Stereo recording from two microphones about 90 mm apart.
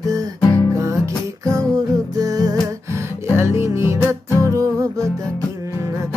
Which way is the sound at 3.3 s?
30° right (ahead or behind).